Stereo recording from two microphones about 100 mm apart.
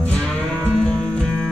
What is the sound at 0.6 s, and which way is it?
Music, 10° left (ahead or behind).